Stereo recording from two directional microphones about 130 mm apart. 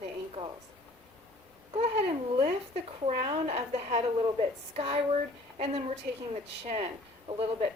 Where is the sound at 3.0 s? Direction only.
50° right (ahead or behind).